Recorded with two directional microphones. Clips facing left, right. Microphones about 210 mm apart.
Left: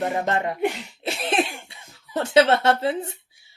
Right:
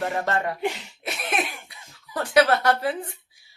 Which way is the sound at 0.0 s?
20° left (ahead or behind).